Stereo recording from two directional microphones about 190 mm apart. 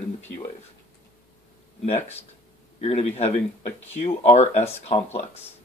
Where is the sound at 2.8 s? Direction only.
35° left (ahead or behind).